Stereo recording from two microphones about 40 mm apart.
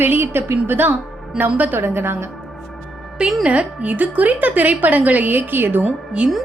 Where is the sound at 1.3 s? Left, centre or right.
Right.